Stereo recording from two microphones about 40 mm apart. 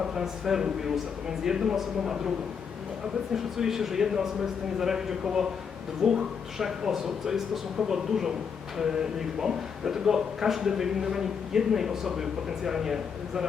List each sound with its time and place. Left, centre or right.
0.0 s speech: centre
3.3 s speech: centre